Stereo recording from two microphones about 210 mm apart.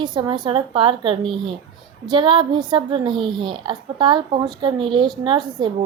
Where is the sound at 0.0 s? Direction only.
20° right (ahead or behind).